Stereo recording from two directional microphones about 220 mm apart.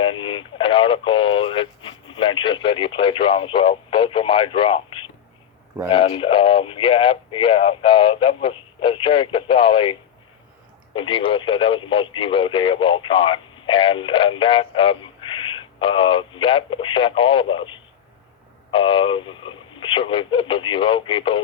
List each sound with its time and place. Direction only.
0.0 s speech: 20° left (ahead or behind)